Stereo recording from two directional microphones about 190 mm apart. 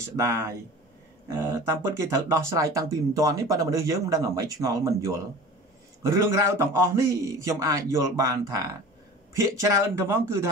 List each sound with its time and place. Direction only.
0.1 s speech: 15° right (ahead or behind)